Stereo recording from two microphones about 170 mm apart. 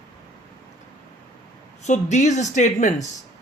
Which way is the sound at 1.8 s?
45° left (ahead or behind).